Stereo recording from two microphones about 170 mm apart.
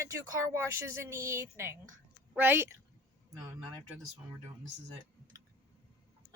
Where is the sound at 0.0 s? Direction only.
15° right (ahead or behind).